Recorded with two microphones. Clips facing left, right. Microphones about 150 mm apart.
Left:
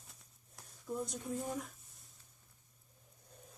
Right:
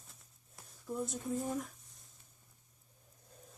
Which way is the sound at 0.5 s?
Centre (ahead or behind).